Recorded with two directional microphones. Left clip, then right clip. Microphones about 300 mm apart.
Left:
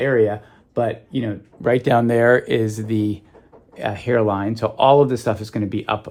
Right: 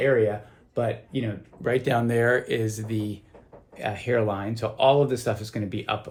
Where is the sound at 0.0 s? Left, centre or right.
Left.